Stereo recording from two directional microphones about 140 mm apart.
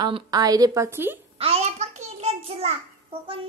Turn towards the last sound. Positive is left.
turn(degrees=-45)  # may be behind; listen again after turning